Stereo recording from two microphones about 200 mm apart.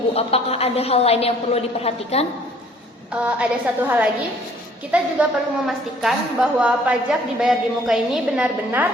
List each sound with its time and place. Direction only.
0.1 s a woman's voice: 30° left (ahead or behind)
3.1 s a woman's voice: 5° right (ahead or behind)